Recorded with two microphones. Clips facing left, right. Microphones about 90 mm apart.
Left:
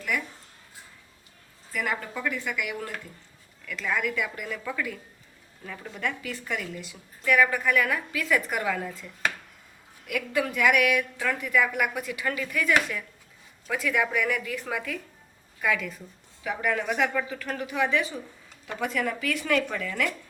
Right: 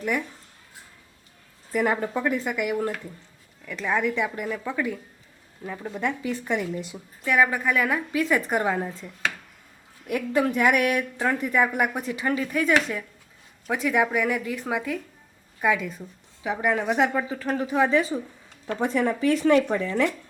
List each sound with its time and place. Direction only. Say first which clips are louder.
1.7 s a woman's voice: right 7 dB; 40° right (ahead or behind)
4.4 s a woman's voice: right 4 dB; 20° right (ahead or behind); by 6.9 s 35° right (ahead or behind)
7.3 s a woman's voice: right 1 dB; 20° right (ahead or behind)
10.1 s a woman's voice: right 5 dB; 30° right (ahead or behind)